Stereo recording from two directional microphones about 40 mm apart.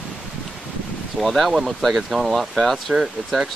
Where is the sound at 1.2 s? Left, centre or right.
Centre.